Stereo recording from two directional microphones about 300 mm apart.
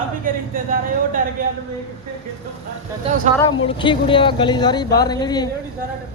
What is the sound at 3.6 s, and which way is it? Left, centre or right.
Speech, centre.